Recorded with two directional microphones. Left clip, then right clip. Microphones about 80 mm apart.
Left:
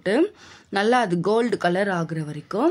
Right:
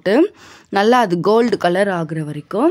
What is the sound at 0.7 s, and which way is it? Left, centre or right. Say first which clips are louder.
Speech: right 6 dB; right.